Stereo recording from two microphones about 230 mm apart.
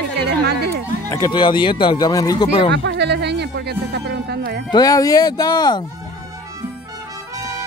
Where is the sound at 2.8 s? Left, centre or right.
Right.